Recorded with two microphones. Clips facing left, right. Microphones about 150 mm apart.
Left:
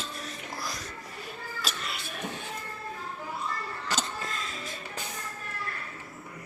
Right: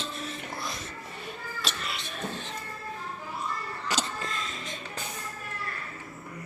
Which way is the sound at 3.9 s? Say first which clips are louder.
Right 1 dB; centre (ahead or behind).